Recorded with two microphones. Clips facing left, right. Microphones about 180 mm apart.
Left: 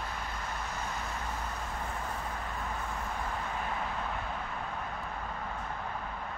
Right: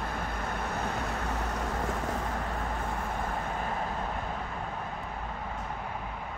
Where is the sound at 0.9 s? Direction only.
70° right (ahead or behind); by 2.1 s 90° right.